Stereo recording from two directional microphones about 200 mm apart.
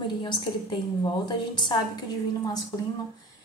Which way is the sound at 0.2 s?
25° left (ahead or behind).